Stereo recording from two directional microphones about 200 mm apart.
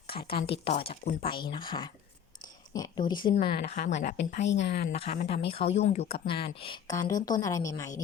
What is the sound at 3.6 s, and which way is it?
Speech, 45° left (ahead or behind).